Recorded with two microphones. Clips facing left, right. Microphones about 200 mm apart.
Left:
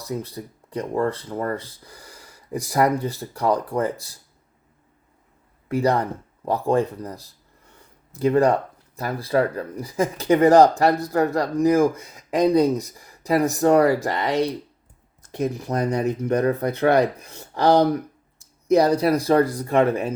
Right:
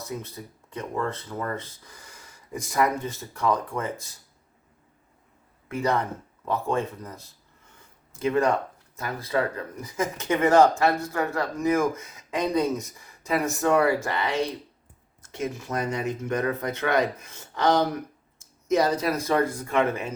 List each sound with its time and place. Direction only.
0.0 s speech: 35° left (ahead or behind)
5.6 s speech: 35° left (ahead or behind)
15.6 s speech: 35° left (ahead or behind)
19.1 s speech: 35° left (ahead or behind)